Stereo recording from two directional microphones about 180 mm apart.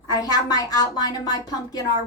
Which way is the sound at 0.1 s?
20° left (ahead or behind).